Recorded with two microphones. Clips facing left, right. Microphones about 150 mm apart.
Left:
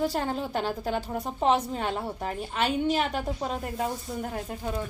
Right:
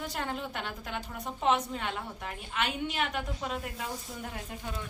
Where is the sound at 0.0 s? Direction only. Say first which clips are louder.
Left 7 dB; 35° left (ahead or behind).